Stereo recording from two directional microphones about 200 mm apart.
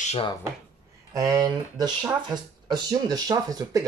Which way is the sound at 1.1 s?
20° right (ahead or behind).